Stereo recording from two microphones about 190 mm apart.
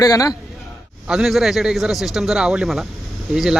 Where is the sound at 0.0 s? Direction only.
15° left (ahead or behind).